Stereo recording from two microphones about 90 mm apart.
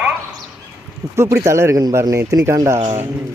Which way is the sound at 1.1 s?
30° right (ahead or behind).